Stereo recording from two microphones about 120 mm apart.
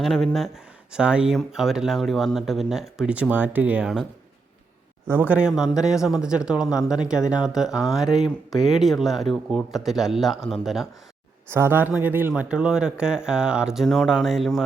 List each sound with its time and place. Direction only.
0.0 s speech: centre (ahead or behind); by 3.8 s 15° right (ahead or behind)
5.0 s a man's voice: 15° right (ahead or behind)
11.5 s a man's voice: 20° right (ahead or behind); by 14.6 s centre (ahead or behind)